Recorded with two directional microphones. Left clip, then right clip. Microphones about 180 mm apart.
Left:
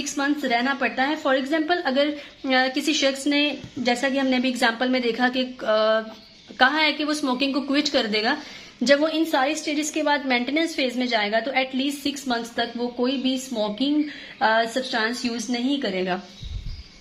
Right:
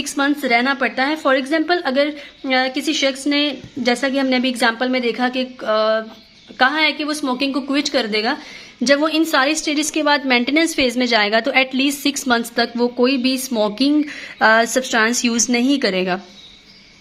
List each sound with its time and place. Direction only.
0.0 s a woman's voice: 25° right (ahead or behind)